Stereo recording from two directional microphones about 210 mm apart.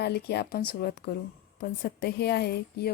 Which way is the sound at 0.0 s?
50° left (ahead or behind).